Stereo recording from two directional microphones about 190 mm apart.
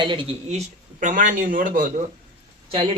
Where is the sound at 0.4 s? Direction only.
35° right (ahead or behind).